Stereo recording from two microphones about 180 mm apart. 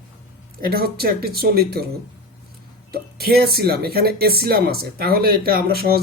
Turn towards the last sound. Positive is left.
turn(degrees=-60)  # may be behind; listen again after turning